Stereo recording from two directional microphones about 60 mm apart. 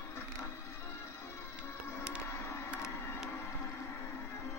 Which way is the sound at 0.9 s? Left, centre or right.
Left.